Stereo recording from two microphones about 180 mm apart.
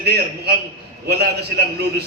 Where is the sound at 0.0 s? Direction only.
65° right (ahead or behind).